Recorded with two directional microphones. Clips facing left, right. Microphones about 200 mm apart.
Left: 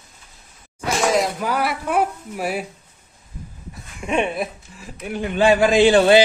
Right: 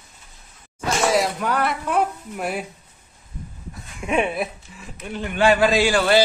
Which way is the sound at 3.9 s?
Centre (ahead or behind).